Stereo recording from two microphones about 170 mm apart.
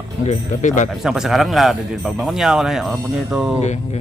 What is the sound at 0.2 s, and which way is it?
Speech, 45° left (ahead or behind).